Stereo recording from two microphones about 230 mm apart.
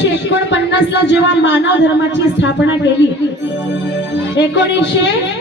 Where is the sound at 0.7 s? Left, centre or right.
Left.